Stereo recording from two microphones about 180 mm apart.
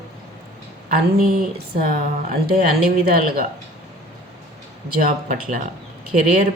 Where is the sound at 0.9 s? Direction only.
55° right (ahead or behind).